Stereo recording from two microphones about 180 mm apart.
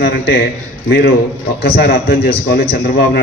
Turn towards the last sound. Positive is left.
turn(degrees=65)  # may be behind; listen again after turning